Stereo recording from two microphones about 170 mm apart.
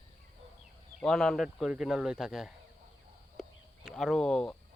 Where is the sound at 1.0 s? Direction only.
Centre (ahead or behind).